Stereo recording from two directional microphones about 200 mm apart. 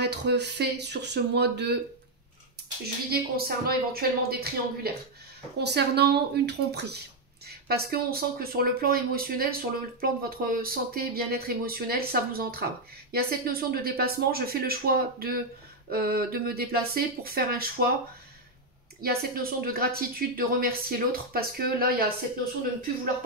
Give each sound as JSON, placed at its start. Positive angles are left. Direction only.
{"t": 0.0, "sound": "speech", "side_deg": -55}
{"t": 3.1, "sound": "speech", "side_deg": -50}
{"t": 18.9, "sound": "speech", "side_deg": -45}